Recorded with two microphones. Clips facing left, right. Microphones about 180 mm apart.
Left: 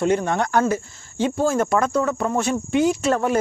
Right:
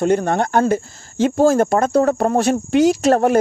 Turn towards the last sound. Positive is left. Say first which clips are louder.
# right 5 dB
turn(degrees=-90)